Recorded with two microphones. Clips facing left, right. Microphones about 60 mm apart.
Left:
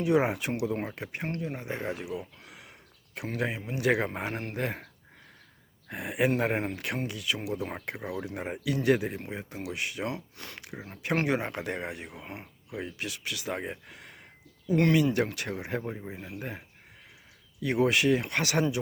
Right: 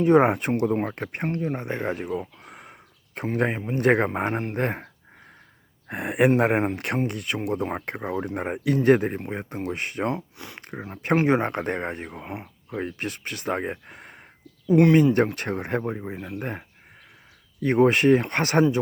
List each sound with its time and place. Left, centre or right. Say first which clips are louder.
0.0 s speech: right 8 dB; right
5.9 s speech: right 7 dB; right
10.2 s speech: right 5 dB; right
10.6 s a sound: right 8 dB; right
10.9 s speech: right 7 dB; right
12.2 s speech: right 7 dB; right
12.7 s speech: right 6 dB; right
17.6 s speech: right 6 dB; right